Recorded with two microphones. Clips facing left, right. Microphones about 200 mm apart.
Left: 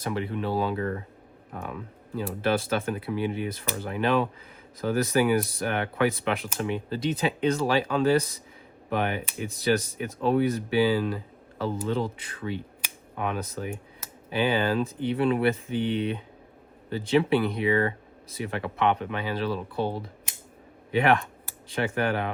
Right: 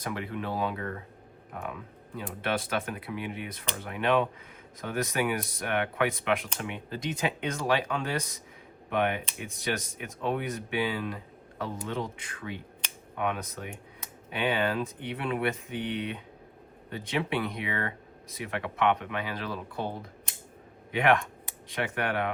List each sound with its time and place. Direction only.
0.0 s speech: 30° left (ahead or behind)
20.9 s speech: 30° left (ahead or behind)